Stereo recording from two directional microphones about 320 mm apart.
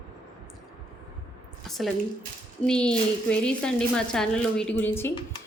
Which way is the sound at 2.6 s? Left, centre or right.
Centre.